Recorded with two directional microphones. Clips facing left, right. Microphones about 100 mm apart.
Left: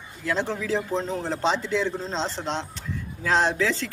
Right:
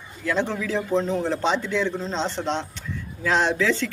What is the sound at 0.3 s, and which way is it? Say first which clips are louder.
Speech: right 1 dB; 30° left (ahead or behind).